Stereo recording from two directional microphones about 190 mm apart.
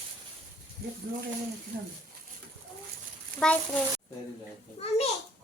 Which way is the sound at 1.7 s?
55° right (ahead or behind).